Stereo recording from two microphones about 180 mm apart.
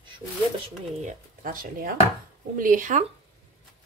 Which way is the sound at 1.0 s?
50° right (ahead or behind).